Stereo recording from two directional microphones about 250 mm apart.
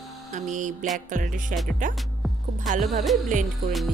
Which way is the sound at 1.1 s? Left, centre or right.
Right.